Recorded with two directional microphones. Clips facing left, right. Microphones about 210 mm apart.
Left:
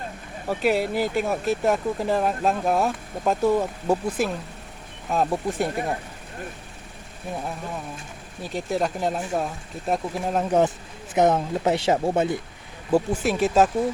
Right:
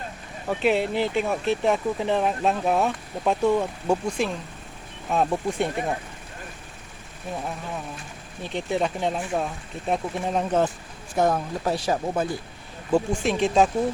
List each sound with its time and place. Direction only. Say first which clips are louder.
0.4 s speech: even; 5° left (ahead or behind)
8.4 s speech: even; centre (ahead or behind)
11.1 s speech: left 3 dB; 20° left (ahead or behind)
12.9 s speech: left 1 dB; 5° left (ahead or behind)